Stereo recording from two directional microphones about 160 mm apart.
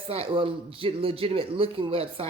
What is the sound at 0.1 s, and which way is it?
A woman's voice, 35° right (ahead or behind).